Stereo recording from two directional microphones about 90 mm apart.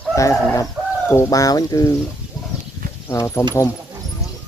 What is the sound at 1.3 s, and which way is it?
Speech, 45° left (ahead or behind).